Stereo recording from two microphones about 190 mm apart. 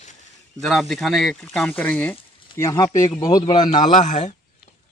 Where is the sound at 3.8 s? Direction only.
40° left (ahead or behind).